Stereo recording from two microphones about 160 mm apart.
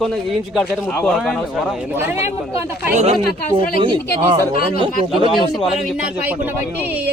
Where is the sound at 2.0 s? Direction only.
15° right (ahead or behind).